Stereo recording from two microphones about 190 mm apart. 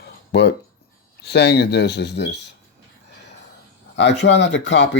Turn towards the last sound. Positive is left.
turn(degrees=70)  # may be behind; listen again after turning